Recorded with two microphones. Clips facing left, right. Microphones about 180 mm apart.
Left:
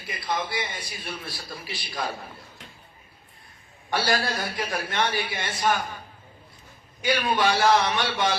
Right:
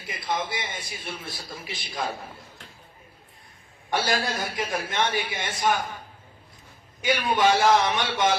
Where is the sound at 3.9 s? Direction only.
20° right (ahead or behind).